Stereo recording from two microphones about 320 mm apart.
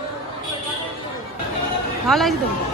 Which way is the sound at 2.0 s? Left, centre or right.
Centre.